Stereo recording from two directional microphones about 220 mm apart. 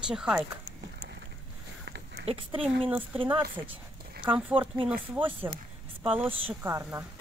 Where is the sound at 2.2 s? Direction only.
25° right (ahead or behind).